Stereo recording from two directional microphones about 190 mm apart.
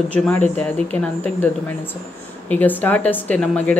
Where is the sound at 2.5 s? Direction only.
10° left (ahead or behind).